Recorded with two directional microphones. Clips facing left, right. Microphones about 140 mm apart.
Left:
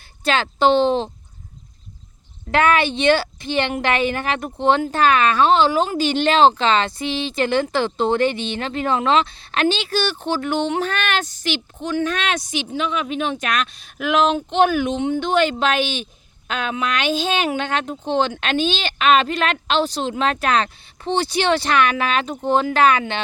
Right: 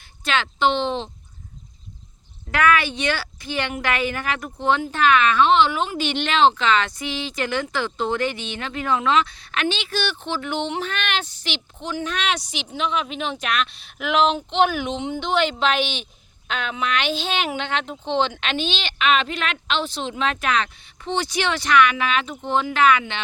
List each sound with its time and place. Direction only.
0.3 s speech: 35° left (ahead or behind)
2.5 s a woman's voice: 25° left (ahead or behind)